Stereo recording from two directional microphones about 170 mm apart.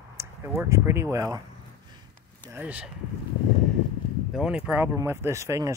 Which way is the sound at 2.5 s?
10° right (ahead or behind).